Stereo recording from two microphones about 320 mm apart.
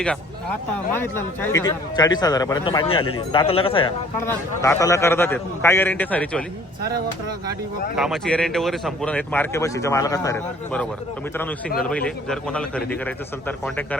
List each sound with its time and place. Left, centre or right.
0.9 s a man's voice: centre
7.9 s speech: centre
11.9 s speech: centre